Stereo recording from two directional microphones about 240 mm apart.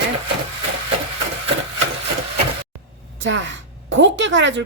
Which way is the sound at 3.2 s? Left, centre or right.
Right.